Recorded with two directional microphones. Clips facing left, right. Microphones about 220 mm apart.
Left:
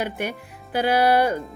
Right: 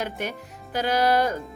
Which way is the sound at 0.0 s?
10° left (ahead or behind).